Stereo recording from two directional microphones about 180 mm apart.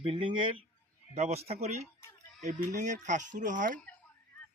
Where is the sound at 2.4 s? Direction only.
45° right (ahead or behind).